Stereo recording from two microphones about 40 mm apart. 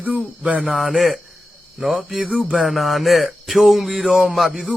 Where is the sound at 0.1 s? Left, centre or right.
Right.